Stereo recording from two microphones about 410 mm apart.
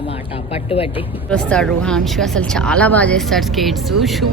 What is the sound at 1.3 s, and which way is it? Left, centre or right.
A woman's voice, centre.